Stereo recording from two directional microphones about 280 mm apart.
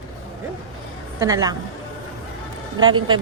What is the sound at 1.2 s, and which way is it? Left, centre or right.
Speech, centre.